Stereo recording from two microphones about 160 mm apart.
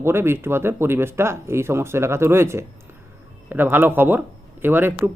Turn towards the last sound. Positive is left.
turn(degrees=-15)  # may be behind; listen again after turning